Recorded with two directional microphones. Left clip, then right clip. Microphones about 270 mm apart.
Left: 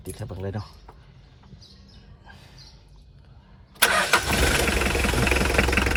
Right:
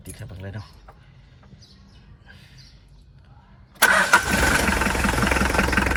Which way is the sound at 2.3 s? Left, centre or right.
Left.